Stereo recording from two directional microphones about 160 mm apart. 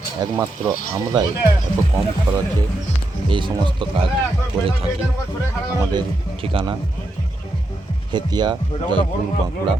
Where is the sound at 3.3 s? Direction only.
30° right (ahead or behind).